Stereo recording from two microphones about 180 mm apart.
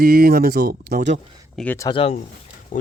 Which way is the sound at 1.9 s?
35° left (ahead or behind).